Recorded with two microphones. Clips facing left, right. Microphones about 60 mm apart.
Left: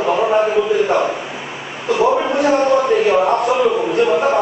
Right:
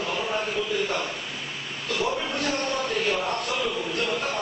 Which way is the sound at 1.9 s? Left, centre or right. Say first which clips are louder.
Left 13 dB; centre.